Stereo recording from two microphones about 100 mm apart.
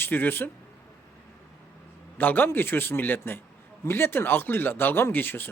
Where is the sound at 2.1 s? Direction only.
20° left (ahead or behind).